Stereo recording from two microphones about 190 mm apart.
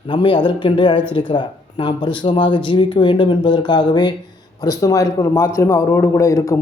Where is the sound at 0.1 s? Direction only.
25° left (ahead or behind).